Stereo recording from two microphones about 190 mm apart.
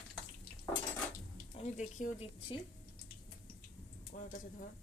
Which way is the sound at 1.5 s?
35° left (ahead or behind).